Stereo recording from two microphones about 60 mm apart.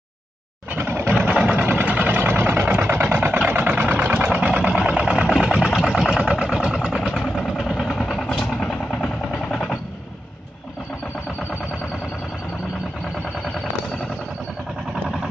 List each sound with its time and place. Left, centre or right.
0.7 s sewing machine: right
1.1 s vehicle: right
7.0 s vehicle: centre
7.9 s vehicle: centre
8.5 s vehicle: centre